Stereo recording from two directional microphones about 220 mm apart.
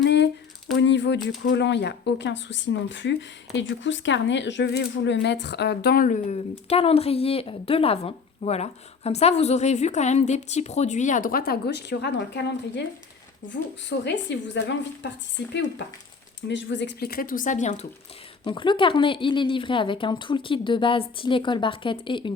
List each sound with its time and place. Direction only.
0.0 s a sound: 50° left (ahead or behind)
1.4 s speech: 55° left (ahead or behind)
14.0 s speech: 55° left (ahead or behind)
16.5 s speech: 55° left (ahead or behind); by 17.8 s 35° left (ahead or behind)
18.4 s speech: 20° left (ahead or behind)